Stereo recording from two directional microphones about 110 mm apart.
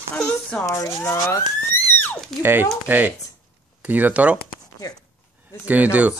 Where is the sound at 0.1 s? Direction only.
10° left (ahead or behind).